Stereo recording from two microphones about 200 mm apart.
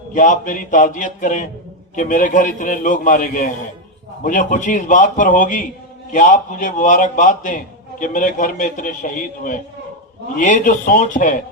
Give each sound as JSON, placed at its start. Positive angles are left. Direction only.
{"t": 0.1, "sound": "a man's voice", "side_deg": 40}